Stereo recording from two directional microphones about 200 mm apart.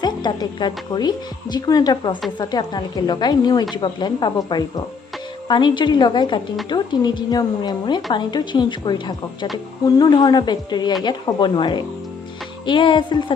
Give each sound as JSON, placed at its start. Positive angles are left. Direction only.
{"t": 0.0, "sound": "speech", "side_deg": 20}